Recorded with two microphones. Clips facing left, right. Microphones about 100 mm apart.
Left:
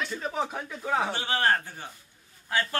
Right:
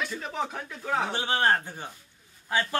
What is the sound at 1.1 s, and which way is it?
Speech, 20° right (ahead or behind).